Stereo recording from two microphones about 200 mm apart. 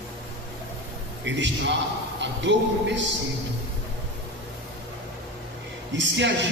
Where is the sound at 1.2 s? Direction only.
65° right (ahead or behind).